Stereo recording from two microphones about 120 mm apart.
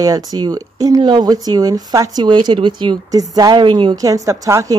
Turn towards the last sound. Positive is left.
turn(degrees=-30)  # may be behind; listen again after turning